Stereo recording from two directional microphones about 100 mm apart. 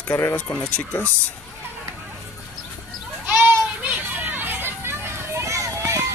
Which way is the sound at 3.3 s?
15° right (ahead or behind).